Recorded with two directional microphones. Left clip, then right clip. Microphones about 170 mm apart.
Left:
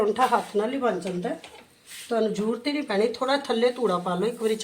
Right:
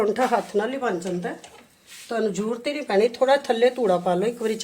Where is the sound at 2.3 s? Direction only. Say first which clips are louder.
Right 1 dB; 70° right (ahead or behind).